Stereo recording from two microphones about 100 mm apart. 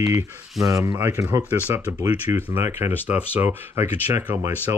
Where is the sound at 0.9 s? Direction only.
25° right (ahead or behind).